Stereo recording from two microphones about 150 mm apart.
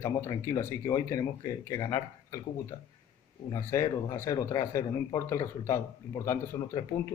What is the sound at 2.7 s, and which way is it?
Speech, 45° left (ahead or behind).